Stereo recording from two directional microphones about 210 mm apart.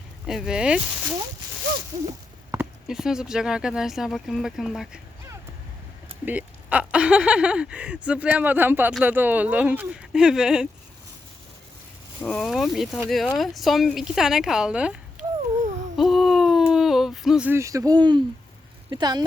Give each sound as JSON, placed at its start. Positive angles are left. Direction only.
{"t": 0.3, "sound": "speech", "side_deg": 0}
{"t": 2.5, "sound": "speech", "side_deg": -5}
{"t": 6.2, "sound": "speech", "side_deg": -5}
{"t": 12.2, "sound": "speech", "side_deg": 5}
{"t": 16.0, "sound": "a sound", "side_deg": 0}
{"t": 18.9, "sound": "speech", "side_deg": -20}